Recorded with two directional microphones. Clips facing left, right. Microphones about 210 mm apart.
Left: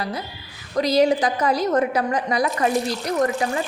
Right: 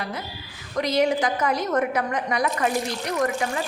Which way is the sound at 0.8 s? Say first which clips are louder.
Left 4 dB; 35° left (ahead or behind).